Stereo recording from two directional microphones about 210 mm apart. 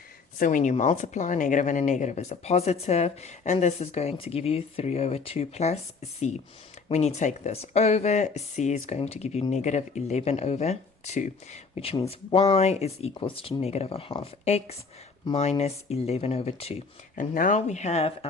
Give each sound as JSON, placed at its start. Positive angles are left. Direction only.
{"t": 0.3, "sound": "speech", "side_deg": 40}
{"t": 17.2, "sound": "speech", "side_deg": 40}